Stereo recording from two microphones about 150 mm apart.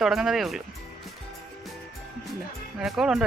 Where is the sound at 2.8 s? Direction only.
5° right (ahead or behind).